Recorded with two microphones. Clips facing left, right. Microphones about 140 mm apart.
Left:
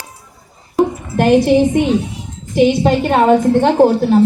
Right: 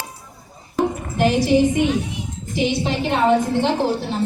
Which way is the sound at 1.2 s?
55° left (ahead or behind).